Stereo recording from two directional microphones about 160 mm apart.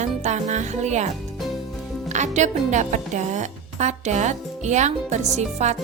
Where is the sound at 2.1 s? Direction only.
50° right (ahead or behind).